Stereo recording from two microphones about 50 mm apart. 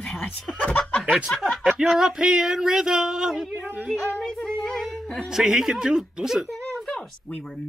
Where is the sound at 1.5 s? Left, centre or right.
Centre.